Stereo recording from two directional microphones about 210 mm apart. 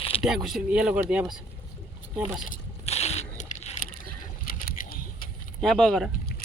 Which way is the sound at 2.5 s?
30° left (ahead or behind).